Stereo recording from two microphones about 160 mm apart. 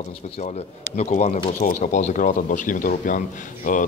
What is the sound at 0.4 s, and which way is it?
Speech, 45° left (ahead or behind).